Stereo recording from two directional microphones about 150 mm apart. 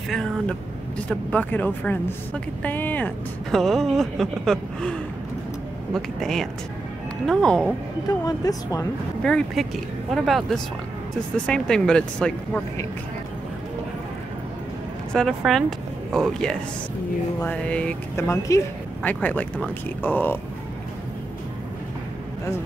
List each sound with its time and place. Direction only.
0.1 s speech: 5° left (ahead or behind)
8.1 s speech: 25° left (ahead or behind)
9.2 s speech: 5° left (ahead or behind)
15.1 s speech: centre (ahead or behind)